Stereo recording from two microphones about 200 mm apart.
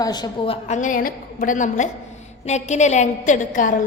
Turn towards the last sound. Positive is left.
turn(degrees=40)  # may be behind; listen again after turning